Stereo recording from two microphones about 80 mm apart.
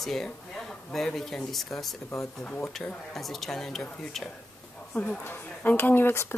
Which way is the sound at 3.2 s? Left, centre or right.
Centre.